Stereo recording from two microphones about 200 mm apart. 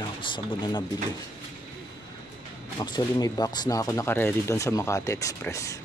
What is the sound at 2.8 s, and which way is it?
Speech, 20° left (ahead or behind).